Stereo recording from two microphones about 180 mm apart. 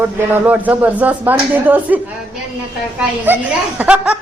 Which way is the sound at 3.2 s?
10° right (ahead or behind).